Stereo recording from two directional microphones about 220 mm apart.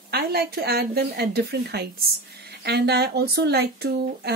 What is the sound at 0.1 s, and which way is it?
Speech, 45° right (ahead or behind).